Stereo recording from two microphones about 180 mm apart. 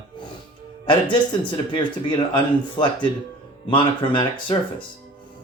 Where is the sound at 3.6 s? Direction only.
25° left (ahead or behind).